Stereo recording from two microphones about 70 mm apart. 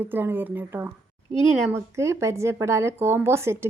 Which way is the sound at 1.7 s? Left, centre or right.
Right.